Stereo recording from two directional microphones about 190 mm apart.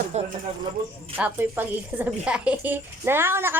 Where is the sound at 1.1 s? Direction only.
10° right (ahead or behind).